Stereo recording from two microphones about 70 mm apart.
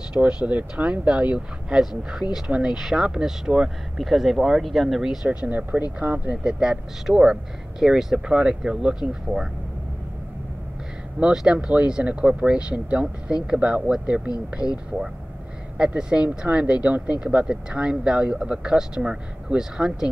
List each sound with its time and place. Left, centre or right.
0.1 s speech: centre
6.3 s speech: centre
11.1 s speech: centre
15.8 s speech: centre